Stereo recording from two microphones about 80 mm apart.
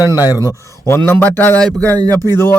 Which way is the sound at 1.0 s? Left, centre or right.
Left.